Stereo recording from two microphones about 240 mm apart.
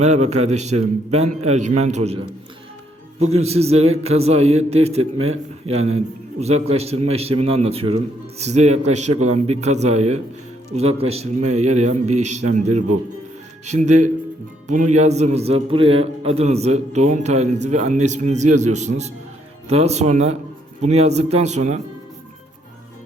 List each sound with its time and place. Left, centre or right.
0.0 s a man's voice: right